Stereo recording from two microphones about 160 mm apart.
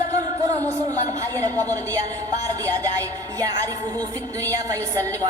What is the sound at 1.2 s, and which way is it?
A woman's voice, 20° right (ahead or behind).